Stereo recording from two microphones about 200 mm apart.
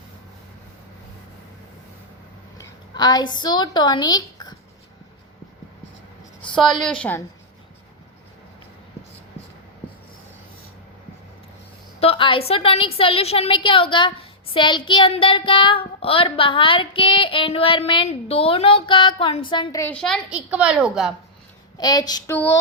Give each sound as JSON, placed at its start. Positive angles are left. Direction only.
{"t": 2.6, "sound": "a woman's voice", "side_deg": 20}
{"t": 6.5, "sound": "a woman's voice", "side_deg": 0}
{"t": 11.9, "sound": "a woman's voice", "side_deg": 30}
{"t": 19.9, "sound": "a woman's voice", "side_deg": 5}
{"t": 21.8, "sound": "a woman's voice", "side_deg": 20}